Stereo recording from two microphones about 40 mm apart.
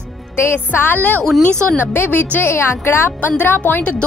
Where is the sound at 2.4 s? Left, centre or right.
Left.